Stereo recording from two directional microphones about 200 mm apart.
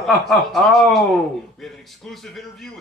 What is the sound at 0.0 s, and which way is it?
Speech, centre (ahead or behind).